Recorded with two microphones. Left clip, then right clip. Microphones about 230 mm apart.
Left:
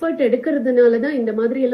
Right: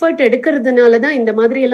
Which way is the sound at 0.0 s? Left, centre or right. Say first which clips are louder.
Right 6 dB; right.